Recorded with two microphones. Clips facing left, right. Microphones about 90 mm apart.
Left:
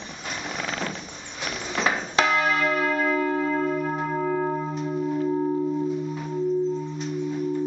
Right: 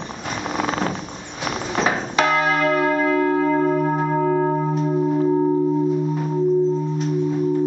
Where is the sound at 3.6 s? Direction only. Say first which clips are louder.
Right 6 dB; 35° right (ahead or behind).